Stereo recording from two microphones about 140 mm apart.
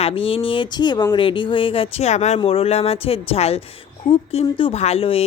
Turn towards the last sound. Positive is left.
turn(degrees=45)  # may be behind; listen again after turning